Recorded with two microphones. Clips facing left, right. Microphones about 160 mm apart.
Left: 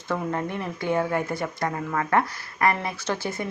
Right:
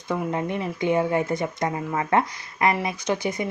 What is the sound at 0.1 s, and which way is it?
A woman's voice, 15° right (ahead or behind).